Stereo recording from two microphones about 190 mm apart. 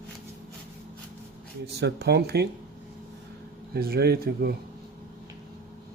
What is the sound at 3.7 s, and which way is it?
Speech, 55° right (ahead or behind).